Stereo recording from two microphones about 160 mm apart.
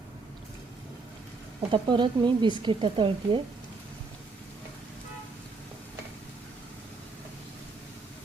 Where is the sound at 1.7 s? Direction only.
30° right (ahead or behind).